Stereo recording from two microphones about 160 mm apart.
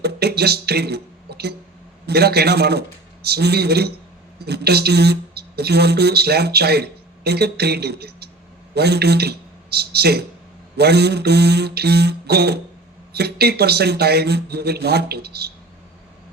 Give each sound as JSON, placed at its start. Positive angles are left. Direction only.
{"t": 0.0, "sound": "a man's voice", "side_deg": -90}